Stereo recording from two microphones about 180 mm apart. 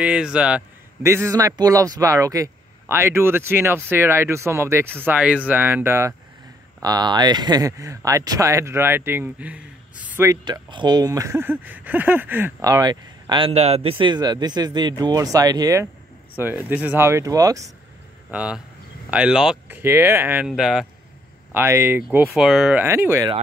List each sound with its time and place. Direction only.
0.0 s a man's voice: 5° right (ahead or behind)
18.3 s a man's voice: 5° right (ahead or behind)
21.5 s a man's voice: 15° right (ahead or behind)
22.3 s a man's voice: centre (ahead or behind)